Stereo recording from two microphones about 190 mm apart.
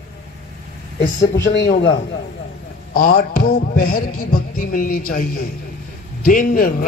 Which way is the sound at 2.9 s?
50° left (ahead or behind).